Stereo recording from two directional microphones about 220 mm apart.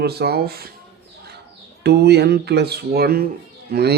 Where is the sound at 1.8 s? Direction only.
50° right (ahead or behind).